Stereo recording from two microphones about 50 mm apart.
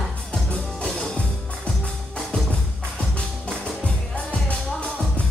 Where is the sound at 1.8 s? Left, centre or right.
Centre.